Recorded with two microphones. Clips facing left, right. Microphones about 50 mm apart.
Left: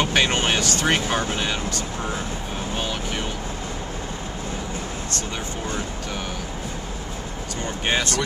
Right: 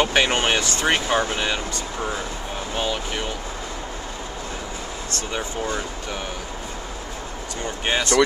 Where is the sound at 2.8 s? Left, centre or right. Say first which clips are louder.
Right 2 dB; centre.